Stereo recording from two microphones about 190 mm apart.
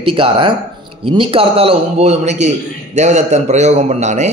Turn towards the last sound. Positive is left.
turn(degrees=-35)  # may be behind; listen again after turning